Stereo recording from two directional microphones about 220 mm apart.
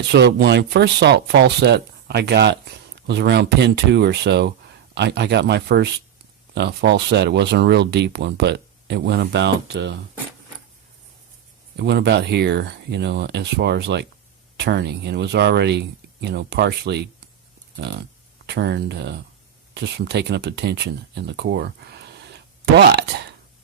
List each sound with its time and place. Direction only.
0.1 s speech: 50° right (ahead or behind)
11.8 s speech: 50° right (ahead or behind)